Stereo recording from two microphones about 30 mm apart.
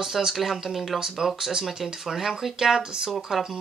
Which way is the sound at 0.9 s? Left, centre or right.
Centre.